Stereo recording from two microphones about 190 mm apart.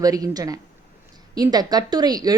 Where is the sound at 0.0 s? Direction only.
20° right (ahead or behind).